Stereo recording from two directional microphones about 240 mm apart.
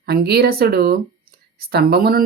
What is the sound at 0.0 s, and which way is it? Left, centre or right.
Speech, right.